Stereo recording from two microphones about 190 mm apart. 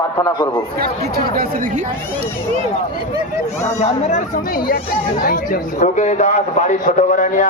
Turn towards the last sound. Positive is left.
turn(degrees=40)  # may be behind; listen again after turning